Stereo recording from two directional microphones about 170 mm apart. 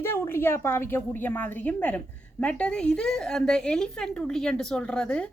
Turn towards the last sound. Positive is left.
turn(degrees=5)  # may be behind; listen again after turning